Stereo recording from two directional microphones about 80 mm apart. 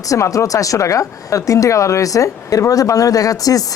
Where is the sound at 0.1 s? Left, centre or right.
Left.